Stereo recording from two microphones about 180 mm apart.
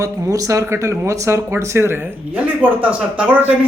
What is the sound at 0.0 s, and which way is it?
Speech, 20° right (ahead or behind).